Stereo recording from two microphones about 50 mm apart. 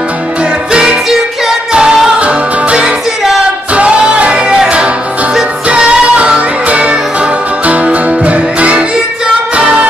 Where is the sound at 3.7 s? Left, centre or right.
Right.